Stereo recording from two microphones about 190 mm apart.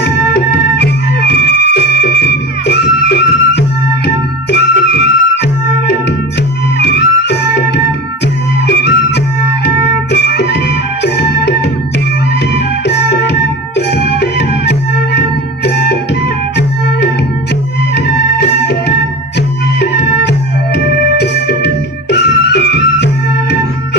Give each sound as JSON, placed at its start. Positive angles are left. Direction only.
{"t": 0.0, "sound": "music", "side_deg": 60}
{"t": 20.7, "sound": "music", "side_deg": 60}